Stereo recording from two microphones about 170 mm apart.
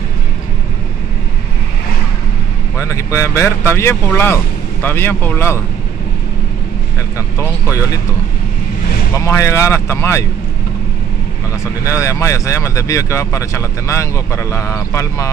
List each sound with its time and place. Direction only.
2.8 s speech: 15° left (ahead or behind)
7.2 s speech: 20° left (ahead or behind)
9.1 s speech: 15° left (ahead or behind)
11.8 s speech: 15° left (ahead or behind)